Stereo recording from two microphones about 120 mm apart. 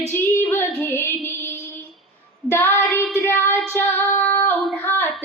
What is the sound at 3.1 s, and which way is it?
Child singing, 20° left (ahead or behind).